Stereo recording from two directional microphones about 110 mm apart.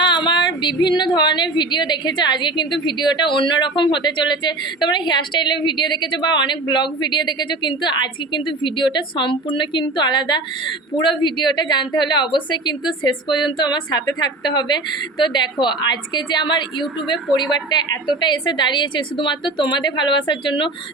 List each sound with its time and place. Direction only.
0.0 s a woman's voice: 40° left (ahead or behind)